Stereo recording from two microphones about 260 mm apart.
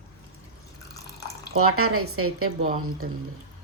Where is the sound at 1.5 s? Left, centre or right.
Right.